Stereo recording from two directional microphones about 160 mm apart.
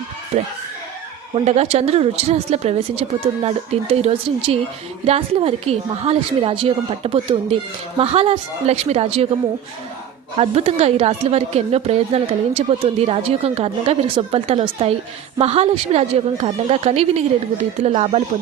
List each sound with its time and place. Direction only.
0.3 s a woman's voice: 45° right (ahead or behind)
10.3 s a woman's voice: 40° right (ahead or behind)